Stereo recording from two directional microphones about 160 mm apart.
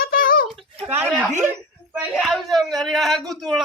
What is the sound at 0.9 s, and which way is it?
Speech, 10° right (ahead or behind).